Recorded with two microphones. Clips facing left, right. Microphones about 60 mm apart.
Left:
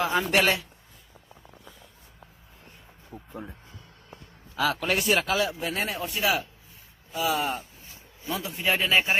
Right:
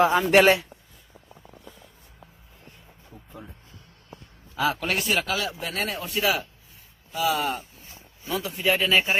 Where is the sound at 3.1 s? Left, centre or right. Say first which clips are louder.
Left 5 dB; left.